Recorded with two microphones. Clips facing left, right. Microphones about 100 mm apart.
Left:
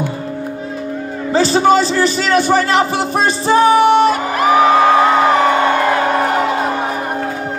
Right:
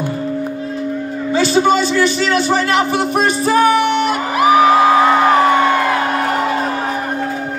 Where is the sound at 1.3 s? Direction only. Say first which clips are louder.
Left 2 dB; 40° left (ahead or behind).